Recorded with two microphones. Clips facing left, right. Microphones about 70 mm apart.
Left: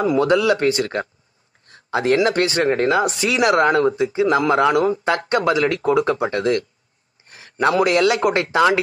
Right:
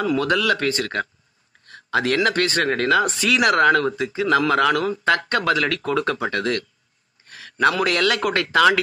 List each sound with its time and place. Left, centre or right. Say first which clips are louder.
0.0 s speech: left 4 dB; left
7.6 s speech: left 3 dB; left